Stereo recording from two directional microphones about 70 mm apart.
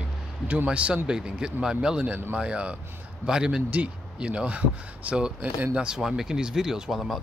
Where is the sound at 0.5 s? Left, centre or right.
Centre.